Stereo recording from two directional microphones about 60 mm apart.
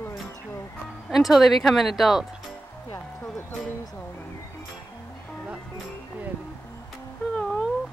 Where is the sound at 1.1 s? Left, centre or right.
Centre.